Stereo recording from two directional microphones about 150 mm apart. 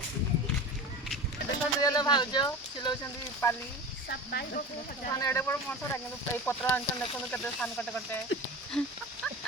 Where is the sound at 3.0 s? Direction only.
15° left (ahead or behind).